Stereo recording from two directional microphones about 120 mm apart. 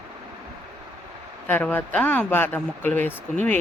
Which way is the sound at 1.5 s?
15° left (ahead or behind).